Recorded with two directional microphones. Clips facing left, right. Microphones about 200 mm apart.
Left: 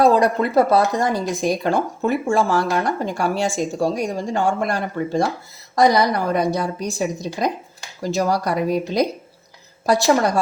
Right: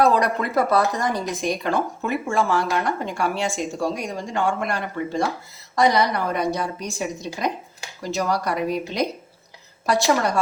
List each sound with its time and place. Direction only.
0.0 s speech: 30° left (ahead or behind)